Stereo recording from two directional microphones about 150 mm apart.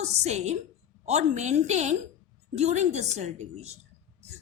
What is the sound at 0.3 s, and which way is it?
Speech, 45° right (ahead or behind).